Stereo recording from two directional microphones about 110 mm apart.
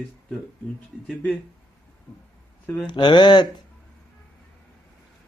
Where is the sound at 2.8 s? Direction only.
45° left (ahead or behind).